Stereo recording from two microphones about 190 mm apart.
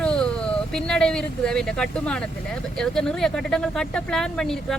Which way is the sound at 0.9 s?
5° left (ahead or behind).